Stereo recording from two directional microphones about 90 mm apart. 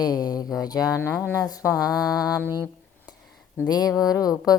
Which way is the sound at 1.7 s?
10° right (ahead or behind).